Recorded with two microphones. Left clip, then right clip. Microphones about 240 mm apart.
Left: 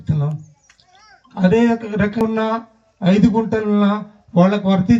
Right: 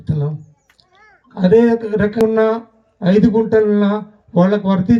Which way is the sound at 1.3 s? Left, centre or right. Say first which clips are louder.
Right 4 dB; centre.